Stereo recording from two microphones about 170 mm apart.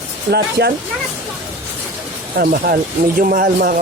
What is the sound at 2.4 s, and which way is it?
Speech, 55° right (ahead or behind).